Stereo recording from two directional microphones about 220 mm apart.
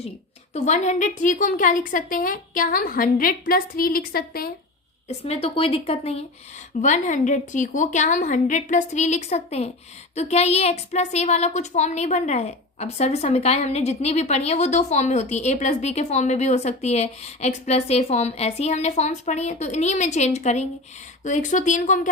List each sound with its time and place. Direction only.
0.5 s a woman's voice: 30° left (ahead or behind)
5.0 s a woman's voice: 25° left (ahead or behind)